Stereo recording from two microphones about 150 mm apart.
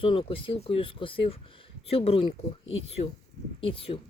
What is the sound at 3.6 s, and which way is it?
Speech, 35° left (ahead or behind).